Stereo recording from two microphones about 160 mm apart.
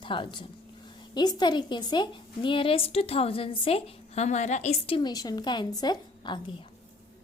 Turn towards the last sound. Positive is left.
turn(degrees=30)  # may be behind; listen again after turning